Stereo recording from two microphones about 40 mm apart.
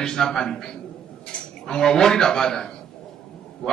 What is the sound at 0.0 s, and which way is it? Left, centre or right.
Speech, centre.